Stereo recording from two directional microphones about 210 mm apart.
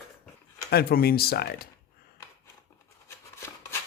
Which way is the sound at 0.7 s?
50° left (ahead or behind).